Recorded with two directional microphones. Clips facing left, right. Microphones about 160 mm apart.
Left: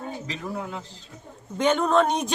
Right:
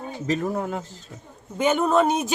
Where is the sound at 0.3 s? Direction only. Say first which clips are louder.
Right 12 dB; 45° right (ahead or behind).